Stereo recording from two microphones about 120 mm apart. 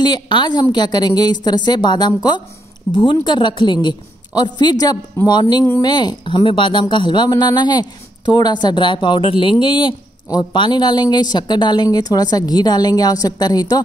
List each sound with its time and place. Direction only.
0.0 s speech: 35° left (ahead or behind)